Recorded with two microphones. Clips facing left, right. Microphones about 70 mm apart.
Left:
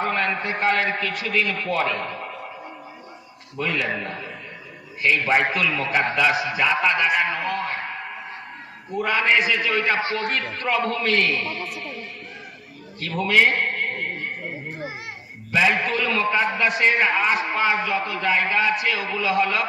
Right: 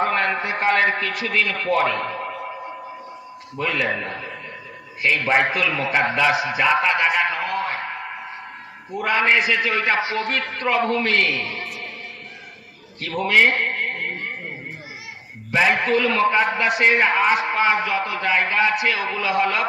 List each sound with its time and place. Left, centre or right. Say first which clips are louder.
0.0 s a man's voice: right 3 dB; right
3.6 s a man's voice: right 2 dB; right
5.4 s a man's voice: right 1 dB; right
6.6 s a man's voice: right 2 dB; right
9.0 s a man's voice: right 1 dB; right
10.0 s a man's voice: right 1 dB; left
10.6 s a man's voice: right 4 dB; right
13.0 s a man's voice: right 1 dB; right
15.5 s a man's voice: right 2 dB; right